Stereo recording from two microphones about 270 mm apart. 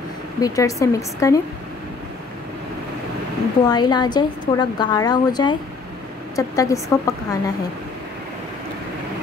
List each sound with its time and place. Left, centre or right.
0.4 s a woman's voice: centre
3.6 s a woman's voice: centre